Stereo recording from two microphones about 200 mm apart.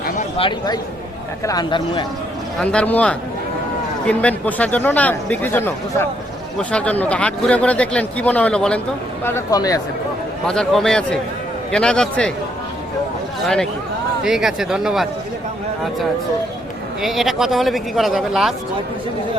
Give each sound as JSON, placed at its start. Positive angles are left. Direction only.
{"t": 0.3, "sound": "speech", "side_deg": 25}
{"t": 2.6, "sound": "speech", "side_deg": 5}
{"t": 9.2, "sound": "speech", "side_deg": 15}
{"t": 10.4, "sound": "speech", "side_deg": 5}
{"t": 14.3, "sound": "speech", "side_deg": 0}
{"t": 17.0, "sound": "speech", "side_deg": 0}